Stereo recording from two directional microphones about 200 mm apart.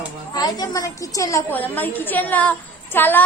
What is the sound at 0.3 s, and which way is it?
A woman's voice, 20° left (ahead or behind).